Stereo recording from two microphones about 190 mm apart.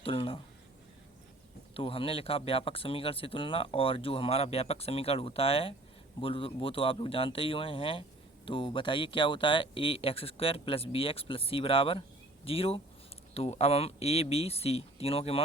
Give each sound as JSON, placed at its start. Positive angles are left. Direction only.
{"t": 0.0, "sound": "speech", "side_deg": 25}
{"t": 1.7, "sound": "speech", "side_deg": 30}